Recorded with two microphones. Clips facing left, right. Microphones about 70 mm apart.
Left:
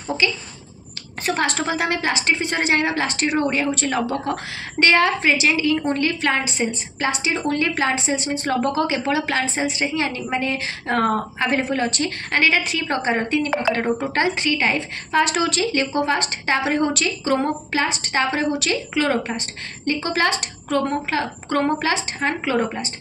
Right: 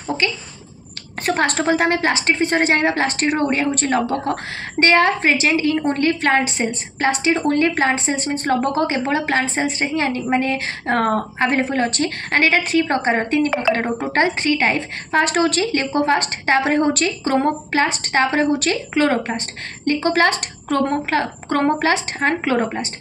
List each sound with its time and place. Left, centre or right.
0.2 s a woman's voice: right